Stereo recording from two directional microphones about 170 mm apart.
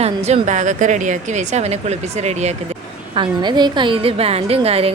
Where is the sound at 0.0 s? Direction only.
40° right (ahead or behind).